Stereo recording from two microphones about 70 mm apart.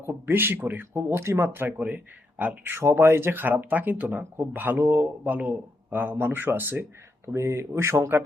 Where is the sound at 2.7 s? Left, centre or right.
Right.